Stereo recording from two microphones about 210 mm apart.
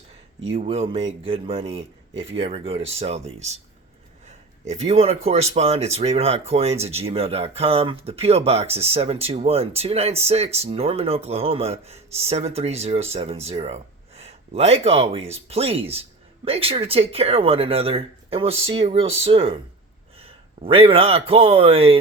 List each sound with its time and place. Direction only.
0.5 s speech: 30° right (ahead or behind)
4.7 s a man's voice: 30° right (ahead or behind)